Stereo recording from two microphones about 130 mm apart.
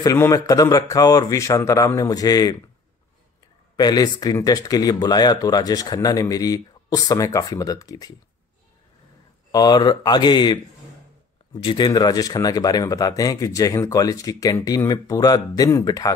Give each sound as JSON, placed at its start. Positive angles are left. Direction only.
{"t": 0.0, "sound": "speech", "side_deg": 25}
{"t": 3.7, "sound": "speech", "side_deg": 30}
{"t": 9.5, "sound": "speech", "side_deg": 30}